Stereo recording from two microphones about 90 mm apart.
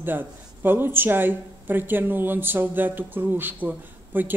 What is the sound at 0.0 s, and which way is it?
Speech, 25° right (ahead or behind).